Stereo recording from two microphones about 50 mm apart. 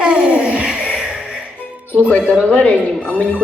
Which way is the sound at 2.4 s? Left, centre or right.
Left.